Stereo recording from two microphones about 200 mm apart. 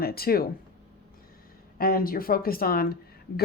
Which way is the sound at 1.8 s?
45° left (ahead or behind).